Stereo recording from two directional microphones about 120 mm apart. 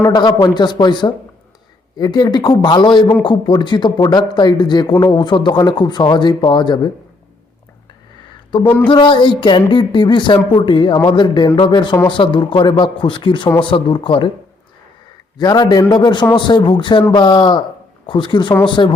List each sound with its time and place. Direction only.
0.1 s speech: 35° left (ahead or behind)
8.6 s speech: 15° left (ahead or behind)
8.9 s speech: 45° left (ahead or behind)
15.4 s speech: 35° left (ahead or behind)